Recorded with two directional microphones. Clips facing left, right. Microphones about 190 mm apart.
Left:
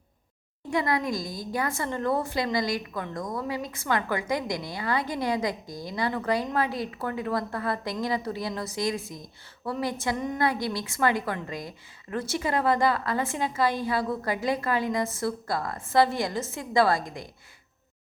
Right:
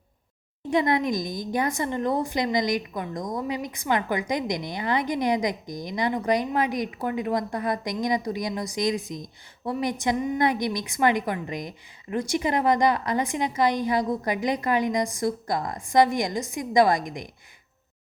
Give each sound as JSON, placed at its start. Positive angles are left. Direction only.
{"t": 0.7, "sound": "a woman's voice", "side_deg": -20}